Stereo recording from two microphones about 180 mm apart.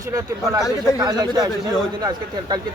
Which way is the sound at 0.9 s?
25° right (ahead or behind).